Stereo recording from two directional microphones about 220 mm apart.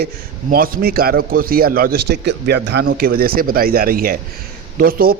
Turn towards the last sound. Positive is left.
turn(degrees=-40)  # may be behind; listen again after turning